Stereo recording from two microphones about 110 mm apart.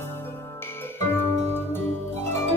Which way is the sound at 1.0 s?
20° left (ahead or behind).